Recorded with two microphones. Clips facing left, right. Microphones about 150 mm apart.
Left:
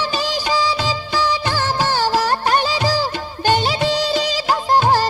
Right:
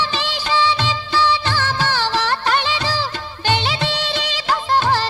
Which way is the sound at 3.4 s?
40° left (ahead or behind).